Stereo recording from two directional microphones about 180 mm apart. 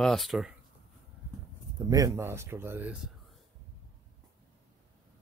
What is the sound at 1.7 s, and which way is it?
Speech, 20° right (ahead or behind).